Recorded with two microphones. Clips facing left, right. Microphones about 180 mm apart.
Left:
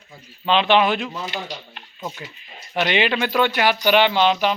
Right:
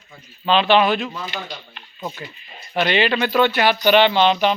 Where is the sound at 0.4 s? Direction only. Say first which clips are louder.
Right 1 dB; 15° left (ahead or behind).